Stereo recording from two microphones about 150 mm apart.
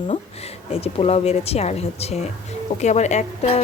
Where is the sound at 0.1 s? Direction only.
45° left (ahead or behind).